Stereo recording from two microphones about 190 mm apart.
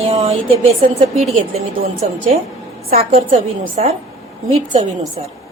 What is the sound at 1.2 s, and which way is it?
A woman's voice, 35° right (ahead or behind).